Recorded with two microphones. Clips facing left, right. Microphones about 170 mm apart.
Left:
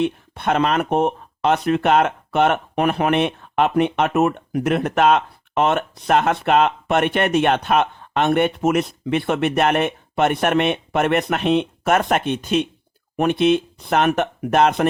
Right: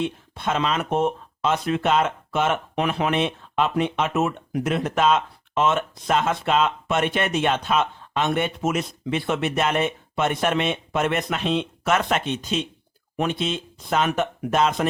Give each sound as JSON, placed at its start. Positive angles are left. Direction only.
{"t": 0.0, "sound": "speech", "side_deg": 60}